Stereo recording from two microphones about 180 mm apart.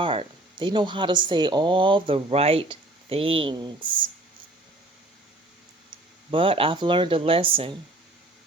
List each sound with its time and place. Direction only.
0.0 s speech: 30° right (ahead or behind)
6.3 s speech: 30° right (ahead or behind)